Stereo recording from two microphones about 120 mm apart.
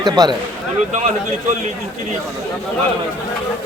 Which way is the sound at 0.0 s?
35° right (ahead or behind).